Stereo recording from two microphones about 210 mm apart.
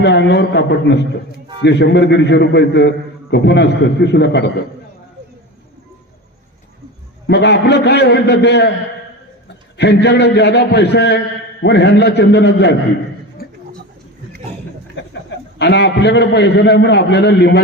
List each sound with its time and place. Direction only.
0.0 s a man's voice: 55° left (ahead or behind)
7.3 s a man's voice: 55° left (ahead or behind)
9.7 s a man's voice: 55° left (ahead or behind)
13.4 s a sound: 45° left (ahead or behind)
15.0 s a sound: 55° left (ahead or behind)
15.5 s a man's voice: 55° left (ahead or behind)